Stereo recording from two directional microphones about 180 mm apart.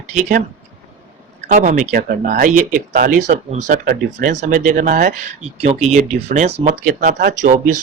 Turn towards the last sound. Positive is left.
turn(degrees=-45)  # may be behind; listen again after turning